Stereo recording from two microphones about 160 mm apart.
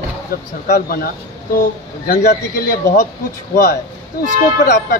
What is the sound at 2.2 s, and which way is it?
Speech, 70° left (ahead or behind).